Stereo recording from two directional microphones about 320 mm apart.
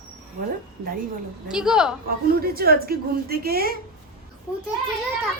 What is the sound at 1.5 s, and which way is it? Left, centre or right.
Speech, centre.